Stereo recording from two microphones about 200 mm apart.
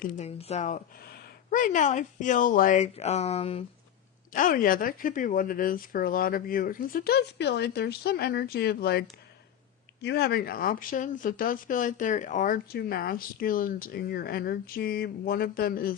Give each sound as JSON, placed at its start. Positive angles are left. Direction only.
{"t": 0.0, "sound": "speech", "side_deg": 40}
{"t": 4.3, "sound": "speech", "side_deg": 45}